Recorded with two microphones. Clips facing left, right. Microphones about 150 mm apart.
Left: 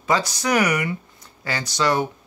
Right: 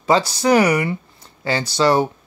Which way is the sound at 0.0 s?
30° right (ahead or behind).